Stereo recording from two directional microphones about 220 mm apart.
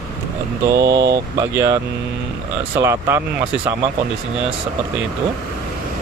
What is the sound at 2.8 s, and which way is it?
Speech, 15° right (ahead or behind).